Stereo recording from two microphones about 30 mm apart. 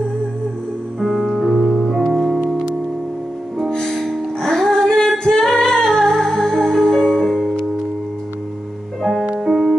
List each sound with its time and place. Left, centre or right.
1.0 s piano: centre
4.0 s music: centre
5.2 s singing: left
5.9 s music: centre
7.2 s music: centre
9.4 s music: centre